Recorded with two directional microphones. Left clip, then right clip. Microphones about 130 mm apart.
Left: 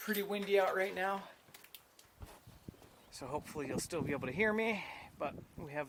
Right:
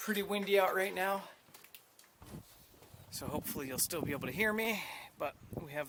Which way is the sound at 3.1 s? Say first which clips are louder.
Right 1 dB; 25° right (ahead or behind).